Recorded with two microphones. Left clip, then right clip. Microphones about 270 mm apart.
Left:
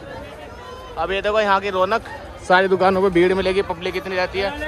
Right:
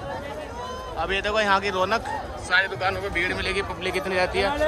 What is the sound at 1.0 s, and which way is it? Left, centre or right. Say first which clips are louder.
A man's voice: left 5 dB; centre.